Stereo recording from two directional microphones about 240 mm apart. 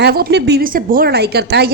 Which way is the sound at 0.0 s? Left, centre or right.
Right.